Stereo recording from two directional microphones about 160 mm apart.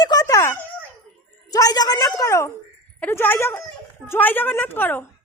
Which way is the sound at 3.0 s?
10° left (ahead or behind).